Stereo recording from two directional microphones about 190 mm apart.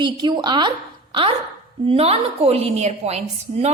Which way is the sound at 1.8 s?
30° right (ahead or behind).